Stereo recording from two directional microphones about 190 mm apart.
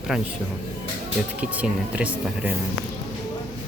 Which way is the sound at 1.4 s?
5° right (ahead or behind).